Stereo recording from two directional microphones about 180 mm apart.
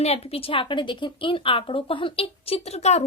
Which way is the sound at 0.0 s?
35° left (ahead or behind).